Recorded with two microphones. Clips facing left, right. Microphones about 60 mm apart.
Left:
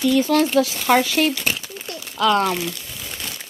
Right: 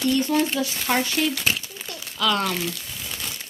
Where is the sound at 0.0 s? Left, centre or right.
Left.